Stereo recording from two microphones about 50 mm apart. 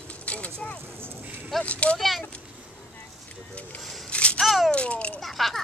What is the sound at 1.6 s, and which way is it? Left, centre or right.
Speech, left.